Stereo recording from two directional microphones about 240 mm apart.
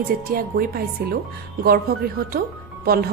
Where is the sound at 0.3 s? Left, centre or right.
Right.